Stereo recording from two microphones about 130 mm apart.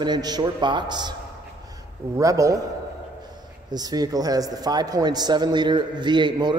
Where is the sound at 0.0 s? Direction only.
30° right (ahead or behind).